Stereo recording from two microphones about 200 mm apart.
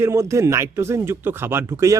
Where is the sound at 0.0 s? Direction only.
15° right (ahead or behind).